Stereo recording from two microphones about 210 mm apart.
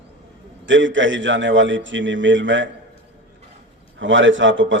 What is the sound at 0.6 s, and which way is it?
A man's voice, 65° right (ahead or behind).